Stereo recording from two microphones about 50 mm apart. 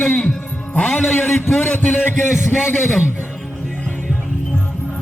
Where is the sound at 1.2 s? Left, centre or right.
Left.